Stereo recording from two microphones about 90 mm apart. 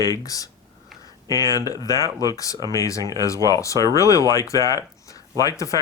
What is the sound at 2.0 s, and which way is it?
Speech, 40° right (ahead or behind).